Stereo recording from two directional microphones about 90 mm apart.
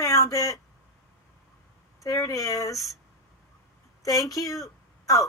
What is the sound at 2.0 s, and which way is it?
Speech, 40° left (ahead or behind).